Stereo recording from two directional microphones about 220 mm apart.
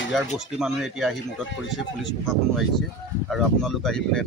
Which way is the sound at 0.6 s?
Centre (ahead or behind).